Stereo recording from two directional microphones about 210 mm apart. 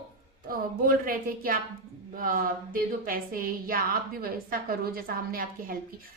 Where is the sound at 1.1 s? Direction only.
45° right (ahead or behind).